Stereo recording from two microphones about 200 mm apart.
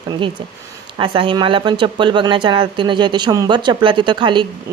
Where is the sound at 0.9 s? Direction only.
25° right (ahead or behind).